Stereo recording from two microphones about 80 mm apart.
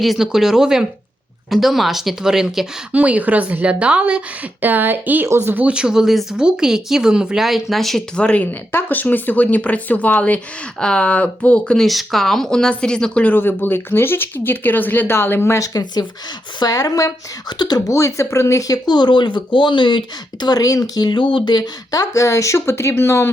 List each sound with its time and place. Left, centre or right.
0.0 s speech: centre
2.9 s speech: centre
5.6 s speech: centre
8.2 s speech: centre
11.9 s speech: centre
13.3 s speech: left
15.5 s a woman's voice: left
17.9 s speech: left
18.7 s speech: left
21.1 s speech: left